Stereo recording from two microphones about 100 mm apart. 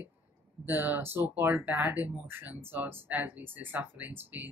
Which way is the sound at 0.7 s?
20° right (ahead or behind).